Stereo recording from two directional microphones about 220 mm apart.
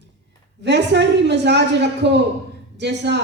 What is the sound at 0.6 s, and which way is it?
Speech, 50° right (ahead or behind).